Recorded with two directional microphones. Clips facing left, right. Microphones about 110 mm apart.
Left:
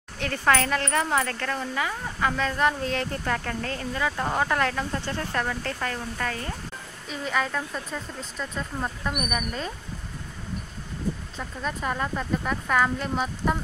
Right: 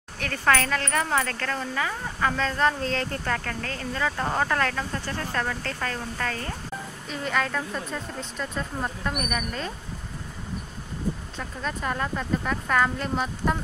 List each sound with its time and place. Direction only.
0.2 s speech: 25° left (ahead or behind)
7.1 s a woman's voice: 5° left (ahead or behind)
11.3 s a woman's voice: 5° left (ahead or behind)